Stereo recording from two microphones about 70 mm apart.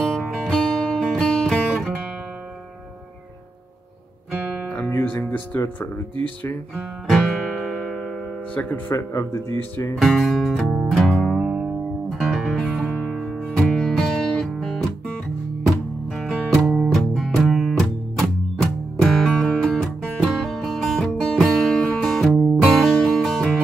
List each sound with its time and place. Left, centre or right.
0.0 s music: centre
4.6 s guitar: left
5.0 s music: left
7.1 s guitar: centre
8.5 s speech: left
8.9 s speech: left
9.9 s music: centre